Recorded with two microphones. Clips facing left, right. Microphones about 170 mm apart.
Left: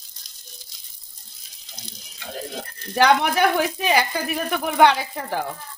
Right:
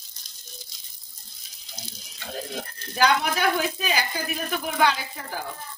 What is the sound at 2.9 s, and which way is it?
Speech, 60° left (ahead or behind).